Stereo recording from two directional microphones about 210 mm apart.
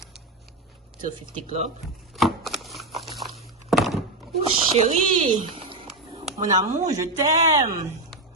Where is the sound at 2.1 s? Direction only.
Centre (ahead or behind).